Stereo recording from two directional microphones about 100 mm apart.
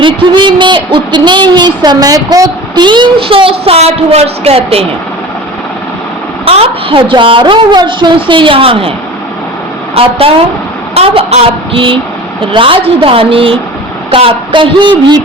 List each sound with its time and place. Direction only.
0.0 s speech: 50° right (ahead or behind); by 4.9 s 75° right (ahead or behind)
6.4 s a woman's voice: 75° right (ahead or behind)
9.9 s a sound: 70° right (ahead or behind)
12.5 s a woman's voice: 60° right (ahead or behind)